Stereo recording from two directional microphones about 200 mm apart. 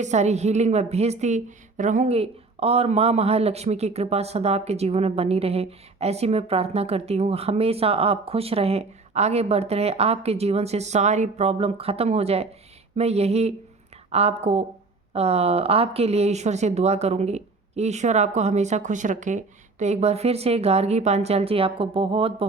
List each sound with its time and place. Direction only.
0.0 s a woman's voice: 35° right (ahead or behind)